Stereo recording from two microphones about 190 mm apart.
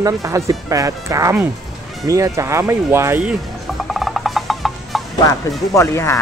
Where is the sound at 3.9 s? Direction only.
Centre (ahead or behind).